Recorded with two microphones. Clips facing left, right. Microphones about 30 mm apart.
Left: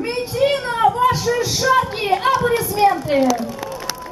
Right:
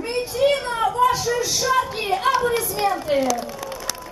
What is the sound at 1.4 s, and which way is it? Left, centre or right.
Music, left.